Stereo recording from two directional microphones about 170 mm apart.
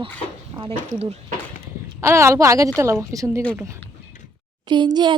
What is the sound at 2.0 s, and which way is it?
Speech, 15° right (ahead or behind).